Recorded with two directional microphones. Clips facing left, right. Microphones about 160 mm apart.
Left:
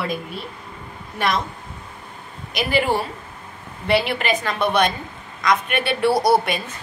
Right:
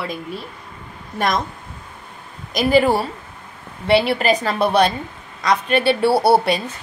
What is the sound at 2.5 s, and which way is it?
A woman's voice, 40° right (ahead or behind).